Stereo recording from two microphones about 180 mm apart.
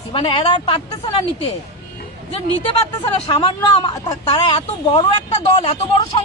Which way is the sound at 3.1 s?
30° left (ahead or behind).